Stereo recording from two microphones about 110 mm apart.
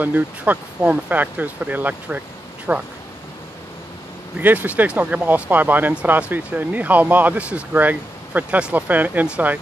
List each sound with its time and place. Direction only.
0.0 s speech: 15° right (ahead or behind)
4.4 s speech: 15° right (ahead or behind)